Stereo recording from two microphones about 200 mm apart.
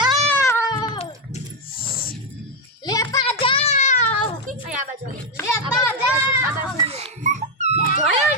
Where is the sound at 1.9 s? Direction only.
45° left (ahead or behind).